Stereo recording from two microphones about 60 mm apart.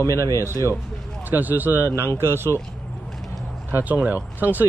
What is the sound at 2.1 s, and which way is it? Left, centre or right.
Speech, right.